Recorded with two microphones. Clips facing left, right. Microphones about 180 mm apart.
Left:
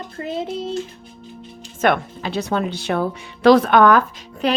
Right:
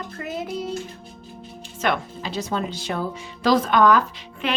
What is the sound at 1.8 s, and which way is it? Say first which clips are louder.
Speech: left 6 dB; 60° left (ahead or behind).